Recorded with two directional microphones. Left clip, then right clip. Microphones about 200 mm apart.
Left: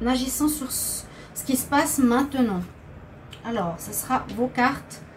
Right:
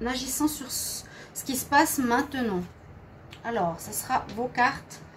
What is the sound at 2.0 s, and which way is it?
Speech, 50° right (ahead or behind).